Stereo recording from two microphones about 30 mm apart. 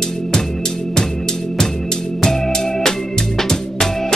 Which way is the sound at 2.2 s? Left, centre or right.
Centre.